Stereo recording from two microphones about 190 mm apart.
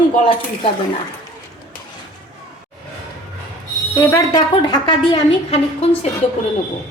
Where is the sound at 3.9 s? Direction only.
15° left (ahead or behind).